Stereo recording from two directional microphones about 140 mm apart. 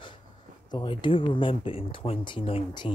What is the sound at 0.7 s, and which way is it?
Speech, 35° left (ahead or behind).